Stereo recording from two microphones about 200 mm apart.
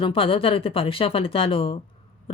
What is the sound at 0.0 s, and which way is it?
Speech, 25° left (ahead or behind).